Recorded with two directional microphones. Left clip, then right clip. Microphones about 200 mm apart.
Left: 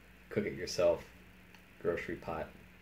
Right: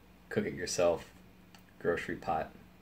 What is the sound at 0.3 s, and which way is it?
Speech, centre (ahead or behind).